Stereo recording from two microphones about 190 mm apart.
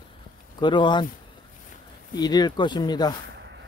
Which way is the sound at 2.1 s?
20° left (ahead or behind).